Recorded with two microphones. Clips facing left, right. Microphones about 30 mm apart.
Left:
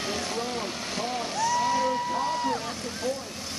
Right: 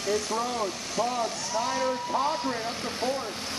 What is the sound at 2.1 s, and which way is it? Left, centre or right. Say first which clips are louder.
Speech: even; centre.